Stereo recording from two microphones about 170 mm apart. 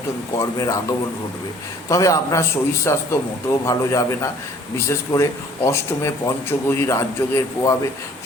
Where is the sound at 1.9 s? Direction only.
20° left (ahead or behind).